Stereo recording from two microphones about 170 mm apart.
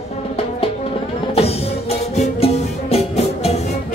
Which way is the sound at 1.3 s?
35° left (ahead or behind).